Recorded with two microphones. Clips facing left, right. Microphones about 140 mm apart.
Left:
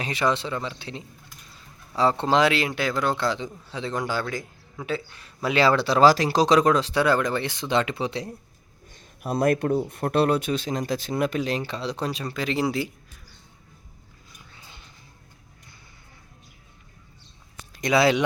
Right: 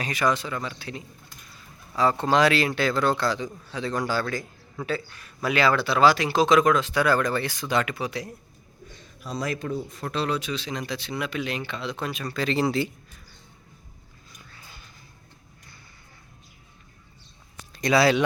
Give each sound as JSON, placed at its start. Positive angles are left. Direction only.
{"t": 0.0, "sound": "speech", "side_deg": 25}
{"t": 8.9, "sound": "speech", "side_deg": 55}
{"t": 12.3, "sound": "speech", "side_deg": 15}
{"t": 14.5, "sound": "a sound", "side_deg": 20}
{"t": 17.7, "sound": "speech", "side_deg": 15}